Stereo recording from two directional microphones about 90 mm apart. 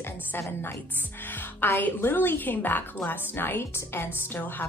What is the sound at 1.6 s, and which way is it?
A woman's voice, 20° left (ahead or behind).